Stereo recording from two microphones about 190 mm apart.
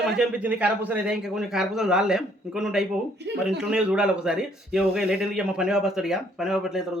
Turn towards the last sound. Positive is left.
turn(degrees=0)  # may be behind; listen again after turning